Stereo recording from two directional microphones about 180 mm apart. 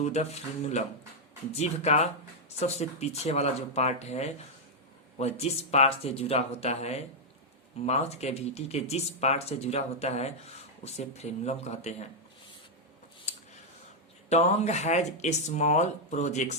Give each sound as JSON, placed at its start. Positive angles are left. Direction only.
{"t": 0.0, "sound": "speech", "side_deg": 40}
{"t": 14.3, "sound": "speech", "side_deg": 40}